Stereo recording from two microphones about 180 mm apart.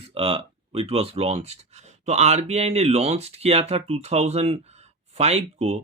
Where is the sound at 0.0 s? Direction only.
30° right (ahead or behind).